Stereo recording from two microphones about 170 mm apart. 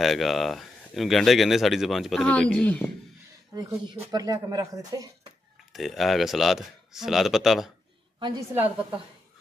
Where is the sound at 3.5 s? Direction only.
25° right (ahead or behind).